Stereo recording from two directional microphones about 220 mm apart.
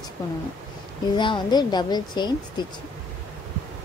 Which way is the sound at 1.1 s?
20° left (ahead or behind).